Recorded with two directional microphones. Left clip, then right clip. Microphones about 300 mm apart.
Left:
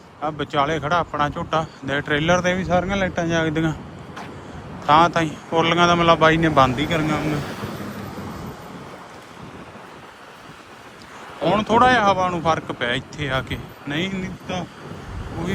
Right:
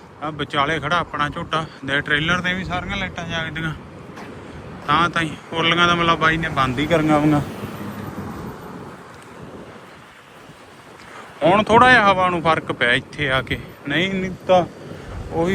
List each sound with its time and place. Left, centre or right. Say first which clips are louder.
0.2 s speech: even; centre
4.9 s speech: left 3 dB; left
6.7 s a man's voice: right 5 dB; centre
11.4 s speech: right 4 dB; centre